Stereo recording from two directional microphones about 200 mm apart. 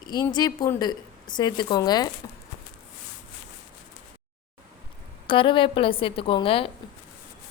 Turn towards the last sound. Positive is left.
turn(degrees=25)  # may be behind; listen again after turning